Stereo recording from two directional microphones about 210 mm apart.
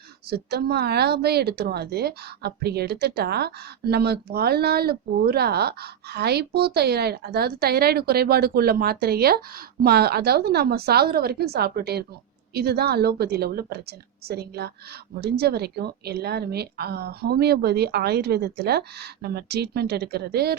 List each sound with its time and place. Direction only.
0.3 s speech: 50° right (ahead or behind)